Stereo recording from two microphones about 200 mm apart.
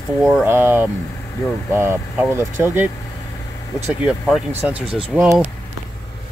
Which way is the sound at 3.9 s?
Centre (ahead or behind).